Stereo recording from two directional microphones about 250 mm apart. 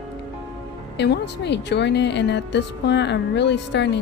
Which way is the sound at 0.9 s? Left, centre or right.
Left.